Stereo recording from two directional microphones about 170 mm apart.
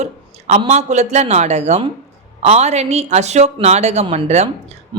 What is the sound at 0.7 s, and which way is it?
Speech, 40° right (ahead or behind).